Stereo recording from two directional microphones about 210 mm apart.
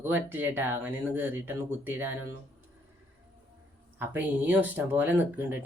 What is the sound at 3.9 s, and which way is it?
Speech, 10° right (ahead or behind).